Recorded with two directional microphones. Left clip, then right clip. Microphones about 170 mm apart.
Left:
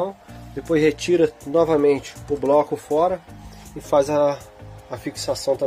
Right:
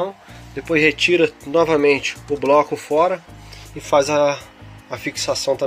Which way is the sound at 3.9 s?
15° left (ahead or behind).